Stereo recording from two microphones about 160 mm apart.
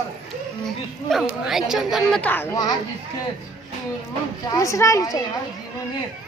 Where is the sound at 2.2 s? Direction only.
10° left (ahead or behind).